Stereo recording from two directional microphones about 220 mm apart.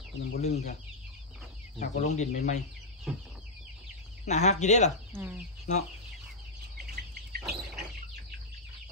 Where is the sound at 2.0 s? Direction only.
30° left (ahead or behind).